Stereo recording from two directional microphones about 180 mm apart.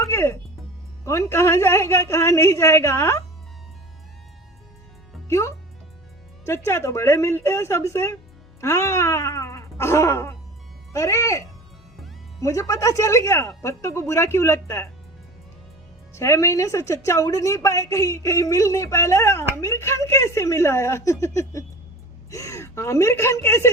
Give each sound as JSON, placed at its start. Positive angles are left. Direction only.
{"t": 0.0, "sound": "a woman's voice", "side_deg": 15}
{"t": 6.4, "sound": "a woman's voice", "side_deg": 15}
{"t": 8.6, "sound": "cat", "side_deg": 15}
{"t": 10.9, "sound": "a woman's voice", "side_deg": 15}
{"t": 16.1, "sound": "a woman's voice", "side_deg": 15}
{"t": 22.3, "sound": "a woman's voice", "side_deg": 15}